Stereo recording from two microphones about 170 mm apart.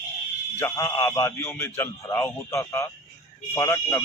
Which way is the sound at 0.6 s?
15° left (ahead or behind).